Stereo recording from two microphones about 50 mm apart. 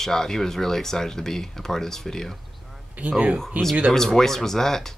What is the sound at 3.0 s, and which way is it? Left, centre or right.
Speech, right.